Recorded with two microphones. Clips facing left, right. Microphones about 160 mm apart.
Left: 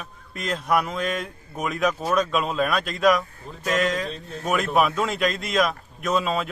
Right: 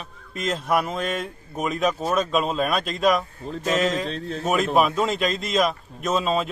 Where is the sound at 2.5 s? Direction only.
25° right (ahead or behind).